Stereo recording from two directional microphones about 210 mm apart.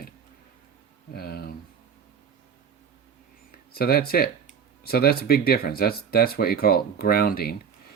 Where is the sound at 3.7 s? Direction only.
45° left (ahead or behind).